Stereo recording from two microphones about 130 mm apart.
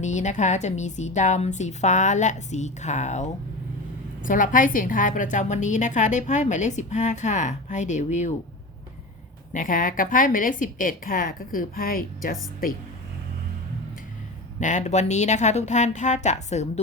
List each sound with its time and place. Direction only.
0.0 s a woman's voice: 65° left (ahead or behind)
4.2 s a woman's voice: 90° left; by 8.3 s 65° left (ahead or behind)
9.5 s a woman's voice: 90° left
14.6 s a woman's voice: 70° left (ahead or behind)